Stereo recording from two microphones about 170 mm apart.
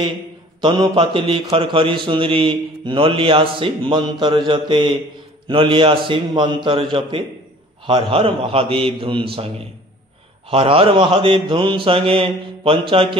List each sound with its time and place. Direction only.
0.6 s mantra: 25° right (ahead or behind)
4.5 s a man's voice: 30° right (ahead or behind)
5.5 s mantra: 30° right (ahead or behind)
10.5 s mantra: 35° right (ahead or behind)